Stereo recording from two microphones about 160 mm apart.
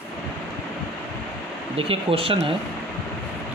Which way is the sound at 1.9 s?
35° right (ahead or behind).